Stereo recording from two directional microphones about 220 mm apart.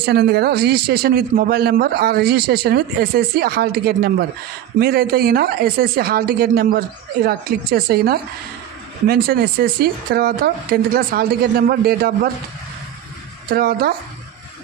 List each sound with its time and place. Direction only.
0.0 s a man's voice: 45° right (ahead or behind)
13.5 s a man's voice: 45° right (ahead or behind)